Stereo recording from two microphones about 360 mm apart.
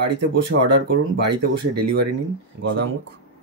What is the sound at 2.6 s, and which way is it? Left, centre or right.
Speech, right.